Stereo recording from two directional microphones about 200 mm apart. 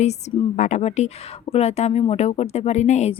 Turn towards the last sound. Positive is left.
turn(degrees=35)  # may be behind; listen again after turning